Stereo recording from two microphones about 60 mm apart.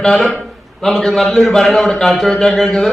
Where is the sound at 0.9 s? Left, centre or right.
Centre.